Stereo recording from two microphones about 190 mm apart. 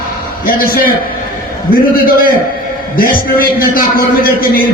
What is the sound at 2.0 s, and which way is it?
A man's voice, 50° left (ahead or behind).